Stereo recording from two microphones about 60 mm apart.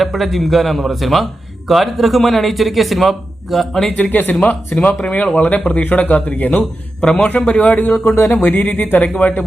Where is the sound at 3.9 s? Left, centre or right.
Left.